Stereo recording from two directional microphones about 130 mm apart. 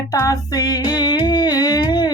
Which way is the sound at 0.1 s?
30° left (ahead or behind).